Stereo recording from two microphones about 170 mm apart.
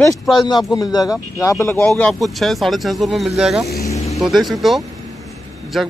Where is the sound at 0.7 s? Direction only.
20° left (ahead or behind); by 3.6 s centre (ahead or behind).